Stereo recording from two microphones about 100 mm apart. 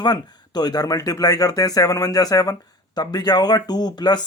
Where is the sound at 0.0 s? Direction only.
45° left (ahead or behind).